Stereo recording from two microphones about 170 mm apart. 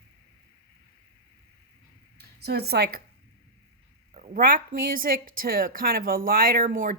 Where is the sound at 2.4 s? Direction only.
70° right (ahead or behind).